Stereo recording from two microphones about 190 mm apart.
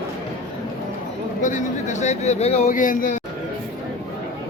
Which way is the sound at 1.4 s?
40° left (ahead or behind).